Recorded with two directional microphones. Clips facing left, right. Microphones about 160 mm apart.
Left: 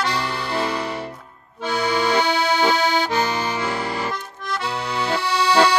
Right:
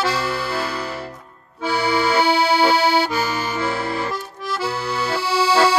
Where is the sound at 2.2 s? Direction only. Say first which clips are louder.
Right 3 dB; 10° right (ahead or behind).